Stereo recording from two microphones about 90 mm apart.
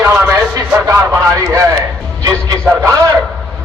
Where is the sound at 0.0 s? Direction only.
25° right (ahead or behind).